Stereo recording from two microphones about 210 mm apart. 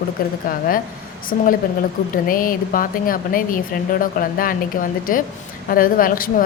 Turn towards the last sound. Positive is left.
turn(degrees=40)  # may be behind; listen again after turning